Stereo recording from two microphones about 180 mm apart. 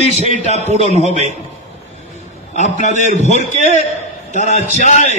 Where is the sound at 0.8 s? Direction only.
40° left (ahead or behind).